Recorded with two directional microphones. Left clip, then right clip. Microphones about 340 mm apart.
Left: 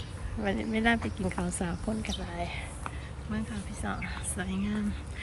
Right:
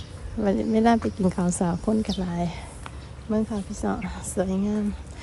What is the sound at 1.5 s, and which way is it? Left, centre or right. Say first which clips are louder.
Speech: right 9 dB; left.